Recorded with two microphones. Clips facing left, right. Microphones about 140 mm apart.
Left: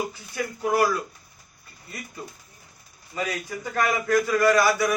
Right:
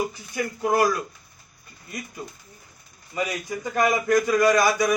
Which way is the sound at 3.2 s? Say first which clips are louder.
Right 2 dB; 15° right (ahead or behind).